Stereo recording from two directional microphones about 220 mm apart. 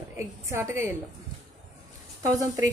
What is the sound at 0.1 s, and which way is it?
Speech, 10° right (ahead or behind).